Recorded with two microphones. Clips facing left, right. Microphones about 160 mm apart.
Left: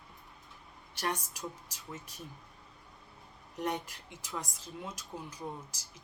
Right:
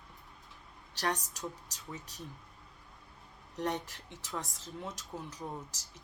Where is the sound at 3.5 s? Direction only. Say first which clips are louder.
Even; 10° left (ahead or behind).